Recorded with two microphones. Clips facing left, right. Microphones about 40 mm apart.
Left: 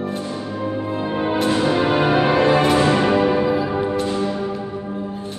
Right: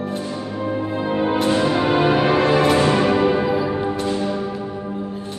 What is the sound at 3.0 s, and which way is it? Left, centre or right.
Music, centre.